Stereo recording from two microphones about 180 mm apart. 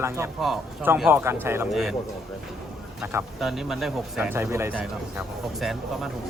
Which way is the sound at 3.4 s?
Centre (ahead or behind).